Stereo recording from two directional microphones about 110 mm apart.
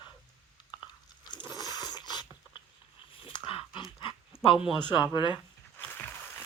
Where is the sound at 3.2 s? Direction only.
55° left (ahead or behind).